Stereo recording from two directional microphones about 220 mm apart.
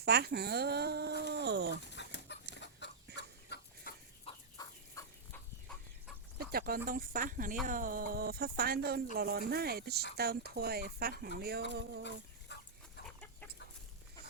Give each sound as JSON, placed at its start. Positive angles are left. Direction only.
{"t": 0.0, "sound": "speech", "side_deg": -45}
{"t": 1.9, "sound": "chicken", "side_deg": 50}
{"t": 4.6, "sound": "chicken", "side_deg": 15}
{"t": 6.4, "sound": "speech", "side_deg": -45}
{"t": 12.5, "sound": "dog", "side_deg": 50}